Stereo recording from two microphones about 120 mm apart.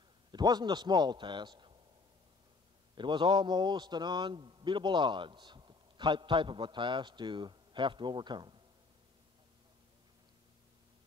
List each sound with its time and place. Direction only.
0.3 s a man's voice: 35° right (ahead or behind)
3.0 s a man's voice: 40° right (ahead or behind)